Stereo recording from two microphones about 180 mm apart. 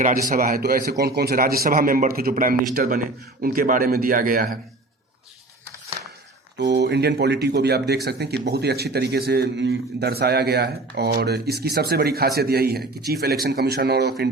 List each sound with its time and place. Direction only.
0.0 s a man's voice: 50° right (ahead or behind)
6.6 s speech: 70° right (ahead or behind)